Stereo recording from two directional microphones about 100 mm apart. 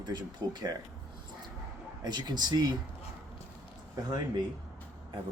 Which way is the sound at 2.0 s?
45° right (ahead or behind).